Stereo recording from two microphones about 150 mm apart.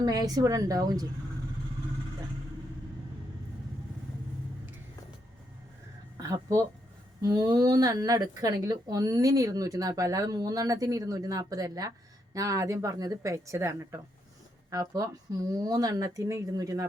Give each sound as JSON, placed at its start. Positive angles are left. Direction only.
{"t": 0.0, "sound": "speech", "side_deg": -25}
{"t": 6.1, "sound": "speech", "side_deg": -25}